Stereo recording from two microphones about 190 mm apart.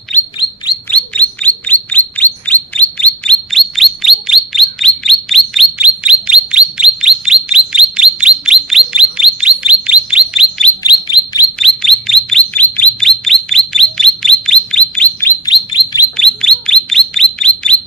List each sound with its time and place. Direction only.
0.9 s bird: 5° left (ahead or behind)
10.8 s bird: 25° left (ahead or behind)
11.6 s chirp: centre (ahead or behind)
15.4 s chirp: 25° left (ahead or behind)
16.1 s bird: centre (ahead or behind)